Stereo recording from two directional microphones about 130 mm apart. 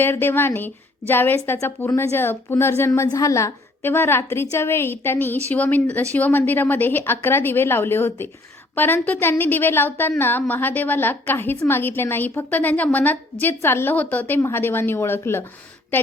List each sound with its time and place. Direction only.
0.0 s a woman's voice: 15° left (ahead or behind)